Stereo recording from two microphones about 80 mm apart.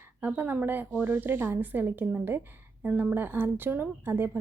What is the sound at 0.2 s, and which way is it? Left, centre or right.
Speech, right.